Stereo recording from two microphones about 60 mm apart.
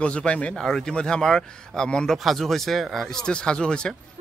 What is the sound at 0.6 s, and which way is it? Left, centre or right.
Speech, centre.